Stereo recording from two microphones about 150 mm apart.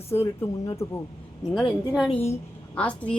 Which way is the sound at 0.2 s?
20° left (ahead or behind).